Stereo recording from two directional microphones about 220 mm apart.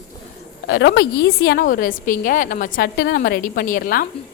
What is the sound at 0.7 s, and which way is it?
A woman's voice, 50° left (ahead or behind).